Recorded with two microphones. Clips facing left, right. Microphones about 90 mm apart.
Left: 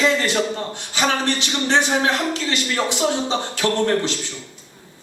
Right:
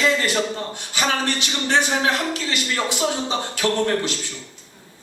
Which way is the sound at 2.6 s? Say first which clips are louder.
Left 2 dB; 10° left (ahead or behind).